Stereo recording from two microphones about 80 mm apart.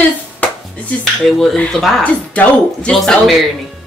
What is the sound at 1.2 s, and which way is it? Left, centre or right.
A man's voice, centre.